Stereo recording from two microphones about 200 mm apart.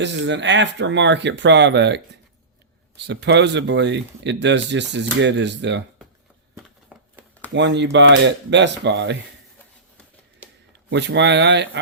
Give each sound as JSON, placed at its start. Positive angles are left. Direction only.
{"t": 0.0, "sound": "speech", "side_deg": -60}
{"t": 6.9, "sound": "a sound", "side_deg": 0}
{"t": 7.5, "sound": "speech", "side_deg": -60}
{"t": 10.7, "sound": "speech", "side_deg": -60}